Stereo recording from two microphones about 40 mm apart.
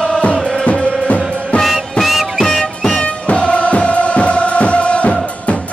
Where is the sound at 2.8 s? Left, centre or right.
Left.